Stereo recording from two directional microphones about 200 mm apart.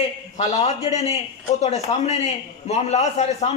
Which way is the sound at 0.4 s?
35° left (ahead or behind).